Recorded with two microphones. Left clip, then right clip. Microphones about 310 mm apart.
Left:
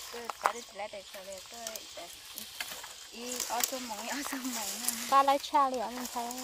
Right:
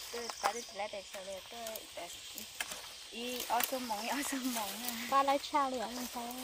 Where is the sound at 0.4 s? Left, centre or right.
Centre.